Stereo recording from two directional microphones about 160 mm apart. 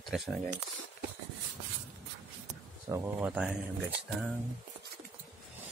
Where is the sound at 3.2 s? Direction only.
5° right (ahead or behind).